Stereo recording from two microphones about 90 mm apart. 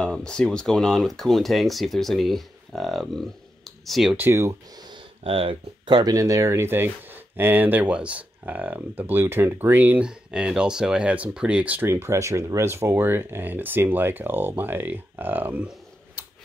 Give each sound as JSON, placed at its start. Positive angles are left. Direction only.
{"t": 0.0, "sound": "speech", "side_deg": 10}
{"t": 4.2, "sound": "speech", "side_deg": -30}
{"t": 4.8, "sound": "a sound", "side_deg": -75}
{"t": 5.9, "sound": "speech", "side_deg": -50}
{"t": 10.0, "sound": "speech", "side_deg": -10}
{"t": 11.9, "sound": "speech", "side_deg": -30}